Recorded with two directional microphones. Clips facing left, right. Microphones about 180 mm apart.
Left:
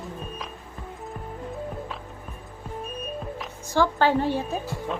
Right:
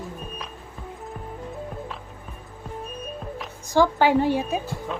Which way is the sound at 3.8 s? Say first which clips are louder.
Right 3 dB; 15° right (ahead or behind).